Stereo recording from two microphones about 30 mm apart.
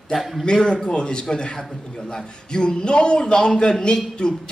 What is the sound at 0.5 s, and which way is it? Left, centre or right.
A man's voice, left.